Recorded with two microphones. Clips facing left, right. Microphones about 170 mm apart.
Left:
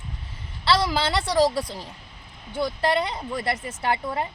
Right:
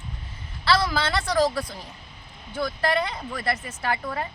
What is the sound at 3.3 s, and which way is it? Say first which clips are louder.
Speech: left 1 dB; 30° left (ahead or behind).